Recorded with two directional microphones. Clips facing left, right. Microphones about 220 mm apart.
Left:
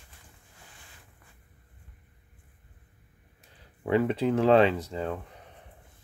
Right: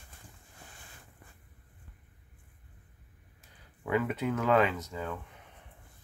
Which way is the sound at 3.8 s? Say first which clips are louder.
Left 5 dB; 30° left (ahead or behind).